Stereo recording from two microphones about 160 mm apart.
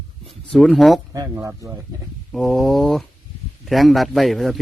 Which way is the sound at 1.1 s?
20° right (ahead or behind).